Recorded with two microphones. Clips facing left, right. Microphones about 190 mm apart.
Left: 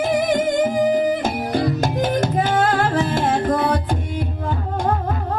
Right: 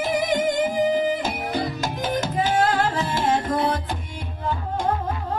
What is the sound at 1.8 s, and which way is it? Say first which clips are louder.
Music: left 6 dB; 50° left (ahead or behind).